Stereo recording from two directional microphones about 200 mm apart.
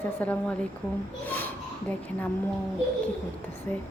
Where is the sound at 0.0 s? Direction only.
5° left (ahead or behind).